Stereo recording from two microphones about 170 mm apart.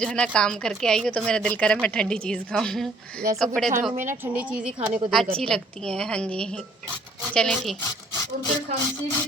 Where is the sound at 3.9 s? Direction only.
50° right (ahead or behind).